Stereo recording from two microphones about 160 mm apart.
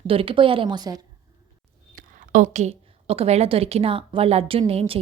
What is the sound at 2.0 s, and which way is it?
A woman's voice, 50° right (ahead or behind).